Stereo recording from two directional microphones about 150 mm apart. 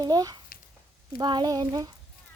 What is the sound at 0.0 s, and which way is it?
Speech, 25° right (ahead or behind).